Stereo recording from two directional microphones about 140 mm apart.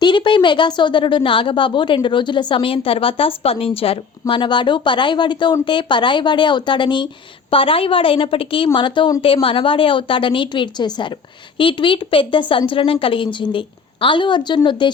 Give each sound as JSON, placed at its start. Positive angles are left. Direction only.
{"t": 0.0, "sound": "a woman's voice", "side_deg": 35}